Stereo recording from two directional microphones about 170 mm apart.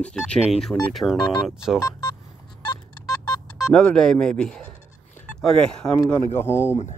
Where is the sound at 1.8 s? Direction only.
25° left (ahead or behind).